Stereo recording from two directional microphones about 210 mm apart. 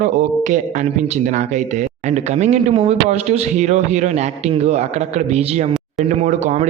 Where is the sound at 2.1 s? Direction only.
35° right (ahead or behind).